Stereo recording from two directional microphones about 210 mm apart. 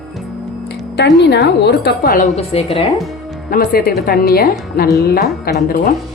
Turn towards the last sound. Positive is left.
turn(degrees=45)  # may be behind; listen again after turning